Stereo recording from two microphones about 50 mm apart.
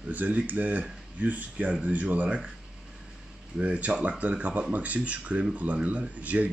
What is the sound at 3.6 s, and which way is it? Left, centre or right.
Speech, right.